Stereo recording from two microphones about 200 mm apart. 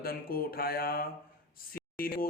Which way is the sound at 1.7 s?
50° left (ahead or behind).